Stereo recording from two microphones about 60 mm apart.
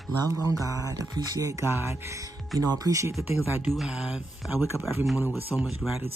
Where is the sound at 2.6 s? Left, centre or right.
Right.